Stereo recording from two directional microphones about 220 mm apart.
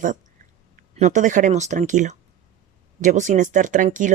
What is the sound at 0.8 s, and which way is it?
Speech, 35° right (ahead or behind).